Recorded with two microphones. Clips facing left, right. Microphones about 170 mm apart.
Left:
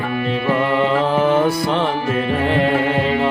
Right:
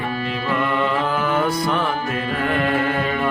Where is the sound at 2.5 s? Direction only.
25° left (ahead or behind).